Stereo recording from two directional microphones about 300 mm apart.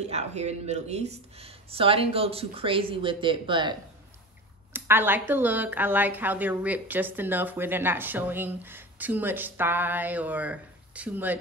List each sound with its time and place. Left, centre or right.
0.0 s speech: right
4.7 s a woman's voice: centre